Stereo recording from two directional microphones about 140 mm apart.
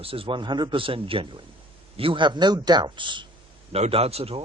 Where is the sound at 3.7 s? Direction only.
45° right (ahead or behind).